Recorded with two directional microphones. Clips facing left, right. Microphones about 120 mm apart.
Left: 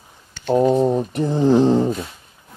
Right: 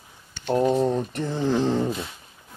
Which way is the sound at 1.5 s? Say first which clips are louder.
Left 6 dB; 25° left (ahead or behind).